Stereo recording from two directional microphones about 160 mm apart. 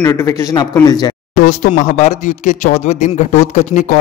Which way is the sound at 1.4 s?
55° left (ahead or behind).